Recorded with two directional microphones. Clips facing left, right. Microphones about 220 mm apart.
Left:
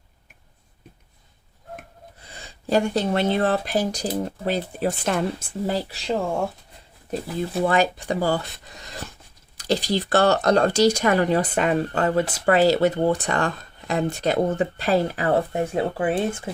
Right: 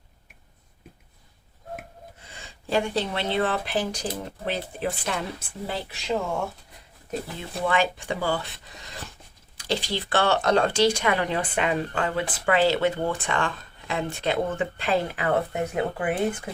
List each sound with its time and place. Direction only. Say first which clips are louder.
2.3 s speech: left 4 dB; 40° left (ahead or behind)
7.6 s speech: left 3 dB; 40° left (ahead or behind)
9.6 s speech: left 5 dB; 40° left (ahead or behind)